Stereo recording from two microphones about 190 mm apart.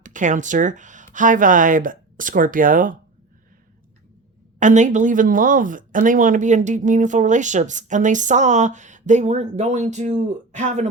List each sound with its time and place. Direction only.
0.0 s speech: 40° right (ahead or behind)
4.6 s speech: 40° right (ahead or behind)